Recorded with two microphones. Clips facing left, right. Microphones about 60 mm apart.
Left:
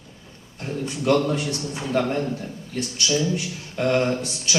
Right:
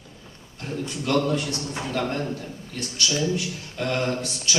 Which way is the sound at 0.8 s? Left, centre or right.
Centre.